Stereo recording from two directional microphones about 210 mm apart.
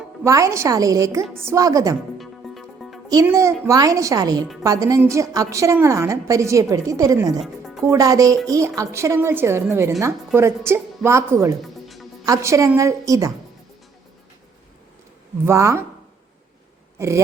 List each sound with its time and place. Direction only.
0.3 s a woman's voice: 15° right (ahead or behind)
2.1 s music: centre (ahead or behind)
3.1 s a woman's voice: 15° right (ahead or behind)
7.3 s music: centre (ahead or behind)
7.9 s a woman's voice: 15° right (ahead or behind)
11.6 s music: centre (ahead or behind)
12.2 s a woman's voice: 15° right (ahead or behind)
15.4 s a woman's voice: 15° right (ahead or behind)